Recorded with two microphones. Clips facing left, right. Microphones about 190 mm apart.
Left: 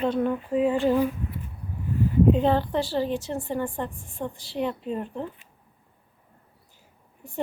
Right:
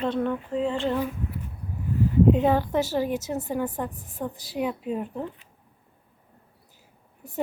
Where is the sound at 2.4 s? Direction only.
10° right (ahead or behind).